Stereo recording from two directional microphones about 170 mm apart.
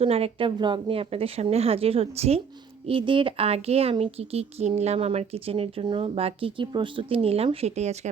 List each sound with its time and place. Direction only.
0.0 s speech: 35° right (ahead or behind)